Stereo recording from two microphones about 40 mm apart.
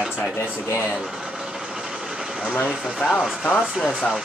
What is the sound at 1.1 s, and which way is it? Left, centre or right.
Vehicle, centre.